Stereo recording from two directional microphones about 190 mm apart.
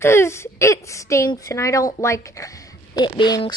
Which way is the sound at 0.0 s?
15° left (ahead or behind).